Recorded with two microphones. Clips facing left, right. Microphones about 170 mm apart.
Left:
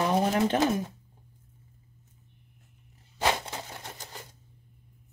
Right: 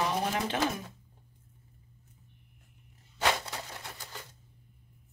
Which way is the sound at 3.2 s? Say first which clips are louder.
Left 2 dB; 25° left (ahead or behind).